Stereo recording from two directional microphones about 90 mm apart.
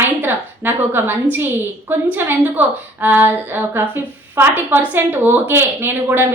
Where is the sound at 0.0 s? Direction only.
20° right (ahead or behind).